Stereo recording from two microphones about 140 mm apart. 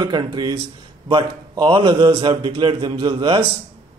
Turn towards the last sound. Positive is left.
turn(degrees=-35)  # may be behind; listen again after turning